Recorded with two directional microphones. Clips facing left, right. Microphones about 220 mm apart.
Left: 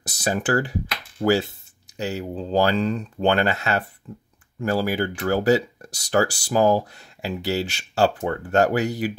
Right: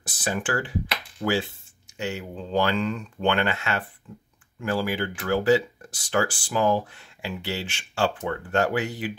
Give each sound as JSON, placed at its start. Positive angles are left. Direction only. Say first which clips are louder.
{"t": 0.0, "sound": "speech", "louder": "left 4 dB", "side_deg": 40}